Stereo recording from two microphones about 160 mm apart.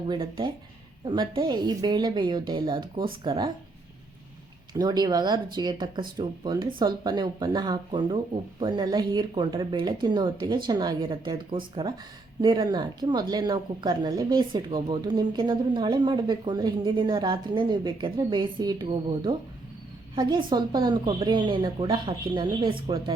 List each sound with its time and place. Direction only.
0.1 s speech: 30° right (ahead or behind)
4.8 s speech: 25° right (ahead or behind)